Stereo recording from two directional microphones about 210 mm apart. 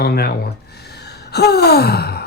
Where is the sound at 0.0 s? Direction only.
50° left (ahead or behind).